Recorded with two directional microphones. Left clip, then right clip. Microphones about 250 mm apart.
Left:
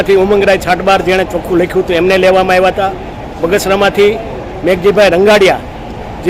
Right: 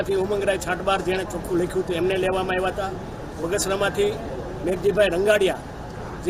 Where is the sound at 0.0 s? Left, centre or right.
Right.